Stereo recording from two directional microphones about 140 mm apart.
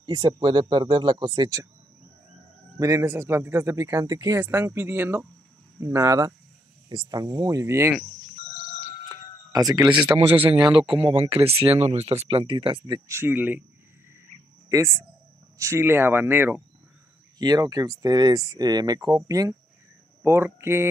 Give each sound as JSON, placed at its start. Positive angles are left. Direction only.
{"t": 0.0, "sound": "speech", "side_deg": -30}
{"t": 2.8, "sound": "speech", "side_deg": -20}
{"t": 9.1, "sound": "a sound", "side_deg": -25}
{"t": 10.5, "sound": "speech", "side_deg": -40}
{"t": 13.2, "sound": "speech", "side_deg": -15}
{"t": 14.7, "sound": "speech", "side_deg": -20}
{"t": 17.4, "sound": "speech", "side_deg": -30}